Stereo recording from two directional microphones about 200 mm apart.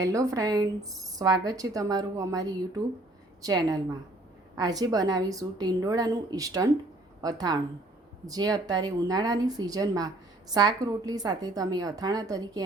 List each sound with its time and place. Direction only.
0.0 s a woman's voice: 15° right (ahead or behind)